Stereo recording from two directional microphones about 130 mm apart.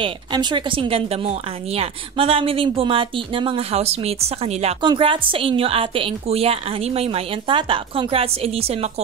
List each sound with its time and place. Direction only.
0.0 s speech: 35° right (ahead or behind); by 4.7 s 55° right (ahead or behind)
4.8 s speech: 40° right (ahead or behind)